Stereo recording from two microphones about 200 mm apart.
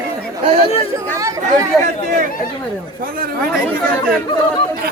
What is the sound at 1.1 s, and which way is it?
Speech, 15° right (ahead or behind).